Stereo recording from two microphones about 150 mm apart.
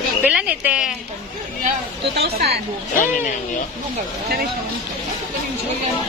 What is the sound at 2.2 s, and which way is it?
Speech, 90° right.